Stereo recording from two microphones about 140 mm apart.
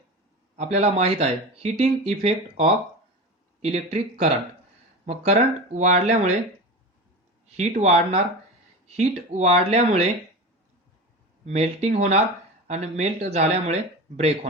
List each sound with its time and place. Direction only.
0.5 s speech: 55° right (ahead or behind)
7.4 s a sound: 50° right (ahead or behind)
7.8 s speech: 50° right (ahead or behind)
11.4 s speech: 50° right (ahead or behind)